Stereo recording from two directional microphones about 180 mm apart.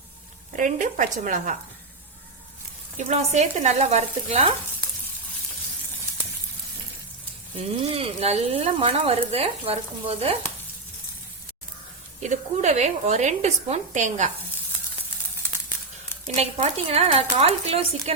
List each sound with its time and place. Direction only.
0.5 s a woman's voice: 45° right (ahead or behind)
3.0 s speech: 40° right (ahead or behind)
7.9 s speech: 35° right (ahead or behind)
12.2 s speech: 40° right (ahead or behind)
16.2 s speech: 40° right (ahead or behind)